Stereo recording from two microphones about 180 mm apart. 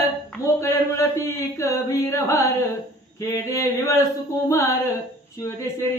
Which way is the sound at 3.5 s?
15° left (ahead or behind).